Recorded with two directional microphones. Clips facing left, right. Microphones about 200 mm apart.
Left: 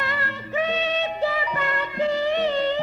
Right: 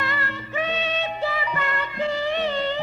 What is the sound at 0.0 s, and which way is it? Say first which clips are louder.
Music: even; 40° left (ahead or behind).